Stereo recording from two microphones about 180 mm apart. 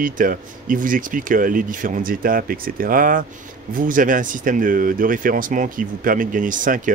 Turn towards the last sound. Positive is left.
turn(degrees=-45)  # may be behind; listen again after turning